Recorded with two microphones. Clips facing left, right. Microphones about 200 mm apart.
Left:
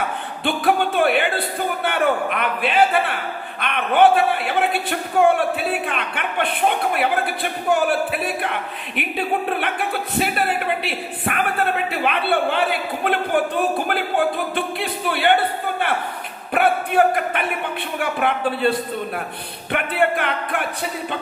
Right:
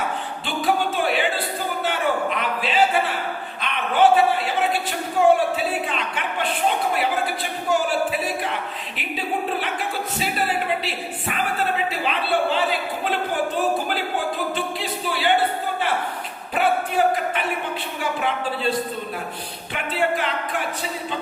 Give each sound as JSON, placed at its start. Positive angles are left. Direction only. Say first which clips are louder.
{"t": 0.4, "sound": "music", "louder": "left 4 dB", "side_deg": 60}
{"t": 1.8, "sound": "a man's voice", "louder": "left 3 dB", "side_deg": 60}
{"t": 14.5, "sound": "a man's voice", "louder": "left 2 dB", "side_deg": 60}
{"t": 16.6, "sound": "a sound", "louder": "left 3 dB", "side_deg": 60}
{"t": 18.0, "sound": "a man's voice", "louder": "left 4 dB", "side_deg": 60}